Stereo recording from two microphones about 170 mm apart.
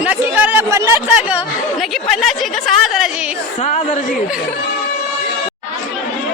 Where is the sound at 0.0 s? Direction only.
10° right (ahead or behind).